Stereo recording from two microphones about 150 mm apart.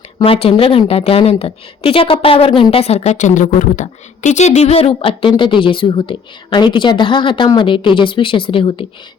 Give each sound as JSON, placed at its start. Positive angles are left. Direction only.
{"t": 0.2, "sound": "a woman's voice", "side_deg": 40}